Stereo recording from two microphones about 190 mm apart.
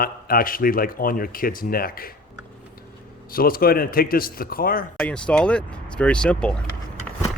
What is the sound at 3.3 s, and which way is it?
Speech, 50° left (ahead or behind).